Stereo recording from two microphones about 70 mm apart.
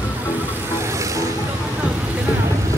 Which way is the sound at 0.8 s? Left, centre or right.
Right.